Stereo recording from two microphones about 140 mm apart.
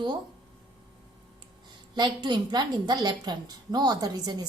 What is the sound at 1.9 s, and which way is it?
A woman's voice, 35° right (ahead or behind).